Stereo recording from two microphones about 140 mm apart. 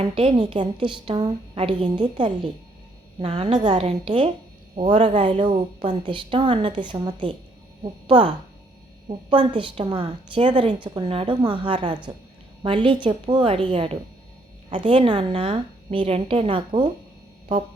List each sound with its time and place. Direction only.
0.0 s a woman's voice: 40° right (ahead or behind)